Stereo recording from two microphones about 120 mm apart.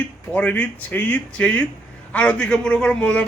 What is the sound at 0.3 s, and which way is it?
A woman's voice, 10° left (ahead or behind).